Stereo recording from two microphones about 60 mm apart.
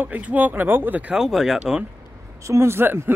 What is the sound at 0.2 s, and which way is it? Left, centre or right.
Speech, right.